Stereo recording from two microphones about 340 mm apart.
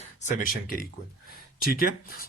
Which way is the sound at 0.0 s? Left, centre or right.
Left.